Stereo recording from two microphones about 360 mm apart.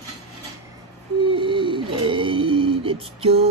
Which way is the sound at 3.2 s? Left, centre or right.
Centre.